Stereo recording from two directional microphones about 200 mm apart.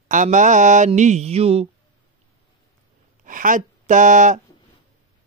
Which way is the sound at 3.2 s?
40° right (ahead or behind).